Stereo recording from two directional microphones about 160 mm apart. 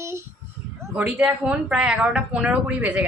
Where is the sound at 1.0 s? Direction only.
10° right (ahead or behind).